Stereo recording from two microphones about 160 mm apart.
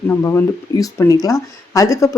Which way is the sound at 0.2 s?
15° left (ahead or behind).